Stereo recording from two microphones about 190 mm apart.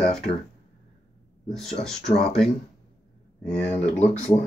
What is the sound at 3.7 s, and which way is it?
Speech, 35° left (ahead or behind).